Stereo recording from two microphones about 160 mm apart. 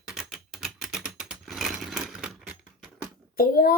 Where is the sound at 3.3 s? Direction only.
70° left (ahead or behind).